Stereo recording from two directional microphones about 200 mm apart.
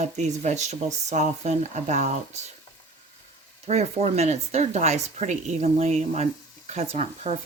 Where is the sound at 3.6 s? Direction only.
35° right (ahead or behind).